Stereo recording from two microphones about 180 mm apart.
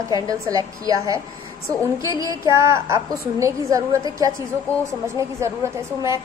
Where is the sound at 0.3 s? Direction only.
20° right (ahead or behind).